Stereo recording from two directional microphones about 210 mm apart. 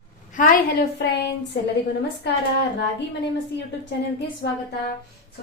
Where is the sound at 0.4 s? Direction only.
40° left (ahead or behind).